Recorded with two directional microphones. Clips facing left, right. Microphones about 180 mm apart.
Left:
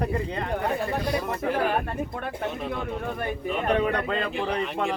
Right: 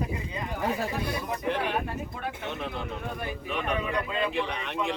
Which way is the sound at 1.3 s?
55° left (ahead or behind).